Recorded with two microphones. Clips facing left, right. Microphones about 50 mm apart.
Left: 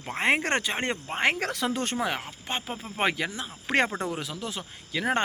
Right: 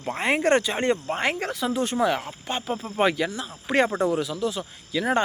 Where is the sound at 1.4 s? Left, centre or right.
Left.